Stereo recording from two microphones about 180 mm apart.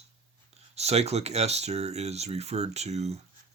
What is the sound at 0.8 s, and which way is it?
Speech, 35° right (ahead or behind).